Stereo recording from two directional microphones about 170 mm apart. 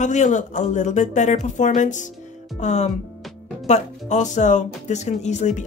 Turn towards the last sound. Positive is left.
turn(degrees=45)  # may be behind; listen again after turning